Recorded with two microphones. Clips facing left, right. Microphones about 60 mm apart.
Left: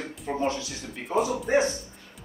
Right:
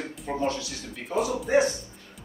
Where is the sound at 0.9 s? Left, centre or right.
Centre.